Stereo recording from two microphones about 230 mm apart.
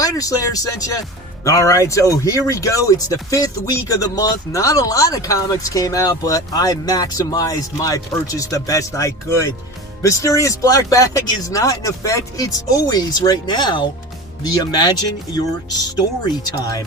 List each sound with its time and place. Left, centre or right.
0.0 s speech: centre
16.0 s speech: centre